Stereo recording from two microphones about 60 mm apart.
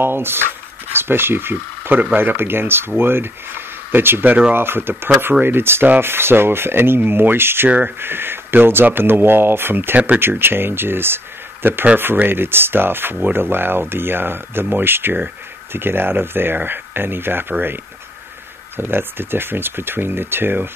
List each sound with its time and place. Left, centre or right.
0.0 s speech: right
18.8 s speech: right